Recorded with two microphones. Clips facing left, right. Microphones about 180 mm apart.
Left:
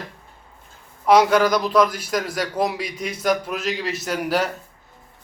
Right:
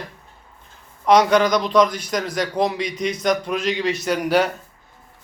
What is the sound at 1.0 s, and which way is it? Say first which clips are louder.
A man's voice: even; 5° left (ahead or behind).